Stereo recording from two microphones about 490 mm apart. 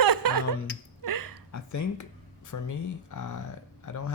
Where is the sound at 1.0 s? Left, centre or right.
Right.